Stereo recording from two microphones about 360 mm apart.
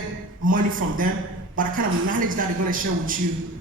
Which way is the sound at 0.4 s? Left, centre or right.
Right.